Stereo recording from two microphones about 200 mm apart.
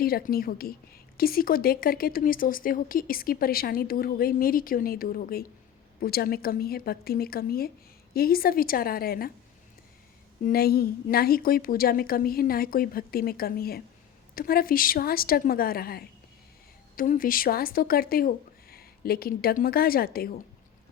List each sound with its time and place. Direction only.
0.0 s a woman's voice: 50° left (ahead or behind)
10.4 s a woman's voice: 50° left (ahead or behind)